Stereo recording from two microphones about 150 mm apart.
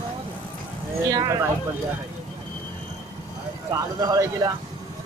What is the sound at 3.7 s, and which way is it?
Speech, 25° right (ahead or behind).